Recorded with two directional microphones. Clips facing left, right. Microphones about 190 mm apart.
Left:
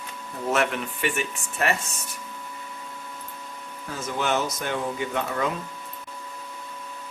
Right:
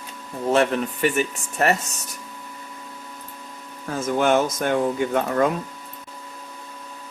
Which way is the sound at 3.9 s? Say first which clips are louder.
Right 7 dB; 50° right (ahead or behind).